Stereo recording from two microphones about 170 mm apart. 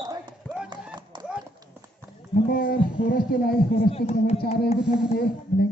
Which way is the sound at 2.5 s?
60° left (ahead or behind).